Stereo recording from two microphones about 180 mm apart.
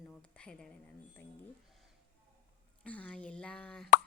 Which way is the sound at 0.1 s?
5° left (ahead or behind).